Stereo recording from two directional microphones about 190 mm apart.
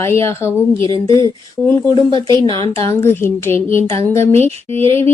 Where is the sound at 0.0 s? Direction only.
15° left (ahead or behind).